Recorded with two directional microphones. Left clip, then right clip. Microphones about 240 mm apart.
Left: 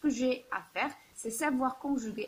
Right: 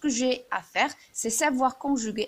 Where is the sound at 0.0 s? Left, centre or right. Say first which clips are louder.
Right 5 dB; right.